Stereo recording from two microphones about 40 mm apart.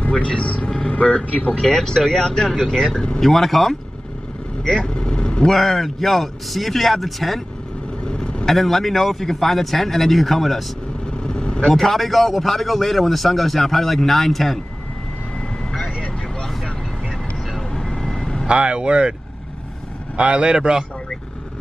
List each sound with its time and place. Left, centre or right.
0.1 s speech: left
0.7 s vehicle: centre
0.9 s speech: left
1.7 s speech: centre
3.2 s speech: centre
4.6 s vehicle: left
5.5 s a man's voice: centre
8.0 s vehicle: left
8.5 s a man's voice: centre
11.2 s vehicle: left
11.7 s a man's voice: centre
17.6 s vehicle: centre
18.5 s speech: right
20.2 s speech: right